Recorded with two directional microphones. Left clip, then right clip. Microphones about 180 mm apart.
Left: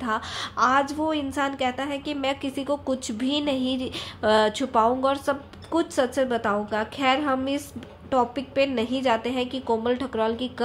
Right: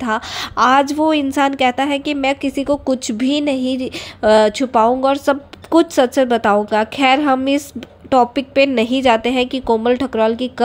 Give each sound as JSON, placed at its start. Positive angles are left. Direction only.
{"t": 0.0, "sound": "a woman's voice", "side_deg": -40}